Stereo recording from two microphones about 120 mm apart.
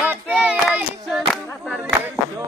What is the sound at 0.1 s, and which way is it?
Hands, 10° right (ahead or behind).